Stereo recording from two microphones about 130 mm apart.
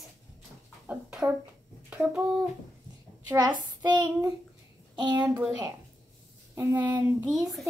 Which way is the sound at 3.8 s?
35° right (ahead or behind).